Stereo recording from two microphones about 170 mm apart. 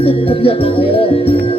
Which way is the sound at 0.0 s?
35° left (ahead or behind).